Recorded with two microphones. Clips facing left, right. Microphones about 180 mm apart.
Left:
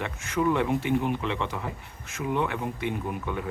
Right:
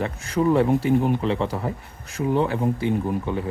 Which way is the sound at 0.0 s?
35° right (ahead or behind).